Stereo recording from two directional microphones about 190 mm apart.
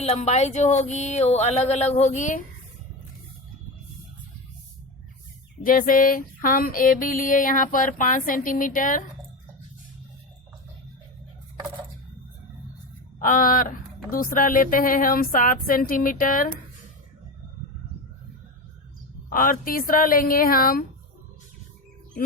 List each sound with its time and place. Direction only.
0.0 s speech: 35° left (ahead or behind)
5.6 s music: 45° left (ahead or behind)
13.1 s music: 45° left (ahead or behind)
19.3 s music: 45° left (ahead or behind)